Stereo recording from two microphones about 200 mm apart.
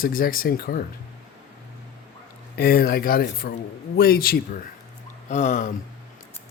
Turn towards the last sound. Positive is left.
turn(degrees=40)  # may be behind; listen again after turning